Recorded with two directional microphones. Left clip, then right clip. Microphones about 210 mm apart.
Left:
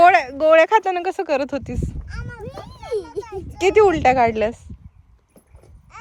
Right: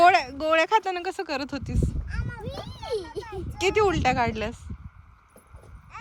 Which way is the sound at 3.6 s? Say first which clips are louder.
Left 8 dB; 5° right (ahead or behind).